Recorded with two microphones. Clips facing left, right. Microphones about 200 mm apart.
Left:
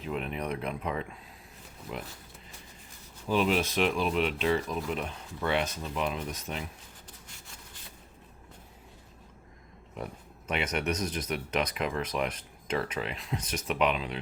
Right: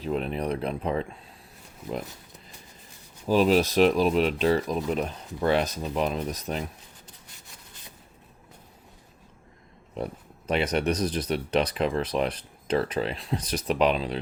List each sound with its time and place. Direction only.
0.0 s speech: 35° right (ahead or behind)
3.2 s speech: 40° right (ahead or behind)
9.9 s speech: 35° right (ahead or behind)